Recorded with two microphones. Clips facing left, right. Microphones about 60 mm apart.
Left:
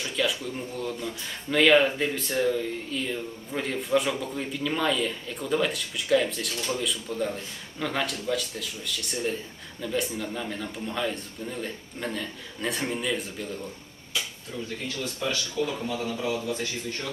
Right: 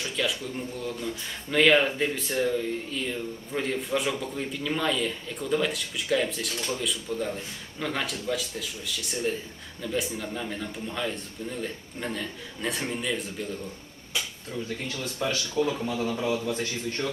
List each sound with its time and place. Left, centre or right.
0.0 s a sound: centre
0.9 s speech: centre
15.0 s speech: right
16.0 s speech: right